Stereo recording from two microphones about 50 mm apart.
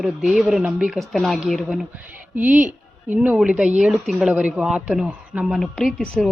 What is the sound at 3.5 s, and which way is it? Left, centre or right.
A woman's voice, right.